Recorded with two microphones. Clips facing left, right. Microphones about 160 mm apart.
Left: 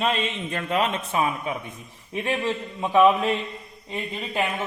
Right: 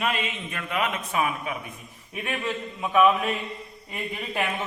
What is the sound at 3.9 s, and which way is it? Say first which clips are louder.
Speech: left 2 dB; 20° left (ahead or behind).